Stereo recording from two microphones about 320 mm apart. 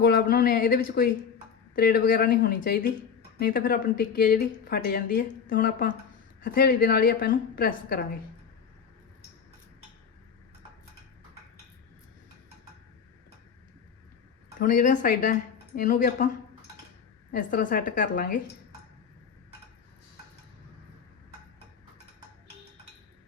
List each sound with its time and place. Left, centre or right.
0.0 s speech: left
14.6 s speech: left